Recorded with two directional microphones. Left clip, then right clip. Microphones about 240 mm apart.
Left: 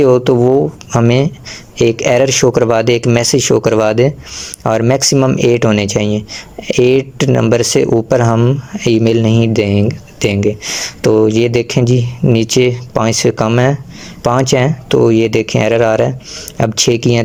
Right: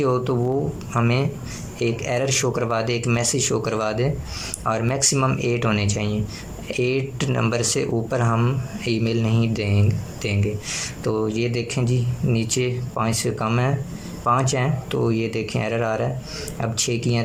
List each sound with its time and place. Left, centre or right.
0.0 s speech: left